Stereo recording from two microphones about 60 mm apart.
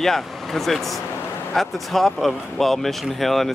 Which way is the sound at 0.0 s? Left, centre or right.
Centre.